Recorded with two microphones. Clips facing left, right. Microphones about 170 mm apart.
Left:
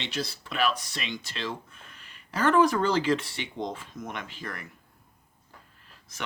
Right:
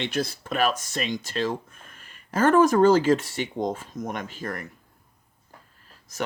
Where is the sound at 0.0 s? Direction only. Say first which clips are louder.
Right 6 dB; 50° right (ahead or behind).